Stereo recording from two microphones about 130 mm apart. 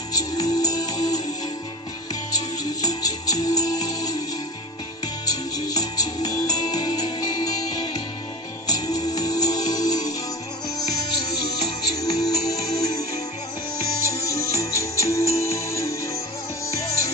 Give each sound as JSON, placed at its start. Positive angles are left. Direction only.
{"t": 0.1, "sound": "music", "side_deg": 30}
{"t": 2.8, "sound": "music", "side_deg": 30}
{"t": 5.2, "sound": "music", "side_deg": 30}
{"t": 8.6, "sound": "music", "side_deg": 30}
{"t": 14.1, "sound": "music", "side_deg": 25}